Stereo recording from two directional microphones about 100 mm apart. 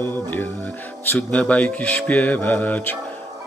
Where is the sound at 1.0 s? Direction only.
15° left (ahead or behind).